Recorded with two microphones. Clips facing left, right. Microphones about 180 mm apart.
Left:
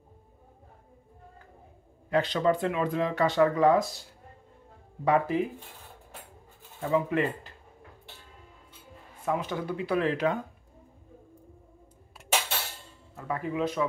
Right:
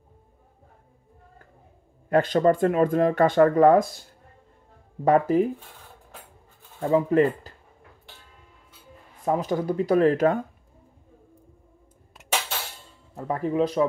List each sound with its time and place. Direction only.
2.0 s speech: 50° right (ahead or behind)
5.0 s speech: 45° right (ahead or behind)
6.8 s speech: 40° right (ahead or behind)
9.2 s speech: 40° right (ahead or behind)
13.1 s speech: 35° right (ahead or behind)